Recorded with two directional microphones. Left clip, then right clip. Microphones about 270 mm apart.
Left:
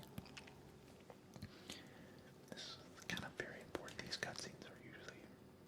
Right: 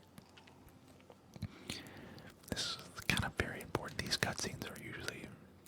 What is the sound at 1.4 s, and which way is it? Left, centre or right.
Whispering, centre.